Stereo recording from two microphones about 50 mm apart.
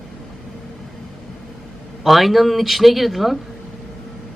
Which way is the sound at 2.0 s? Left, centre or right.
Centre.